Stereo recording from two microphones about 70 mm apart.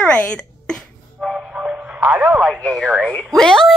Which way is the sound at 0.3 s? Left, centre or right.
Centre.